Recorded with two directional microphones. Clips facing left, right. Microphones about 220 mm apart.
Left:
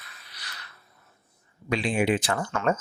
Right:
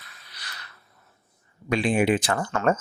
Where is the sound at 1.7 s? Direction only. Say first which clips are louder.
Right 3 dB; 50° right (ahead or behind).